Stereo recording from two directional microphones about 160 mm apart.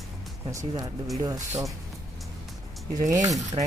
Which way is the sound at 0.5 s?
20° right (ahead or behind).